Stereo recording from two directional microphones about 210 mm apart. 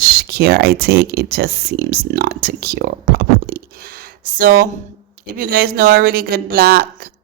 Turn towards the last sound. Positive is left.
turn(degrees=-50)  # may be behind; listen again after turning